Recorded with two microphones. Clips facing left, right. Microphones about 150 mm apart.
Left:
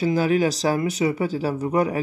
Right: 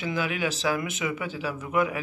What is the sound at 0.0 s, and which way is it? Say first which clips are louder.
Speech: left 9 dB; 40° left (ahead or behind).